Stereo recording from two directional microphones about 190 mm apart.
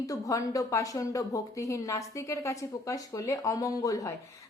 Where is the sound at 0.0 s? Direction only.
15° left (ahead or behind).